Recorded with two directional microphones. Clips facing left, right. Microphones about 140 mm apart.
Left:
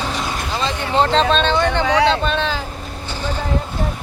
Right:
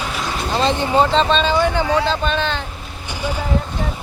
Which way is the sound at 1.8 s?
80° left.